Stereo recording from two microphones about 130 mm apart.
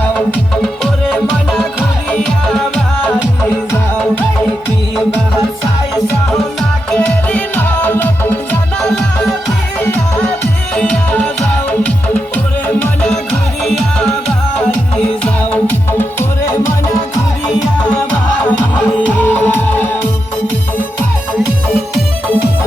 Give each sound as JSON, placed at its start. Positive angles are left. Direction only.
{"t": 0.6, "sound": "music", "side_deg": 0}
{"t": 6.3, "sound": "music", "side_deg": 5}
{"t": 12.6, "sound": "music", "side_deg": 10}
{"t": 15.2, "sound": "music", "side_deg": 15}
{"t": 19.3, "sound": "music", "side_deg": 15}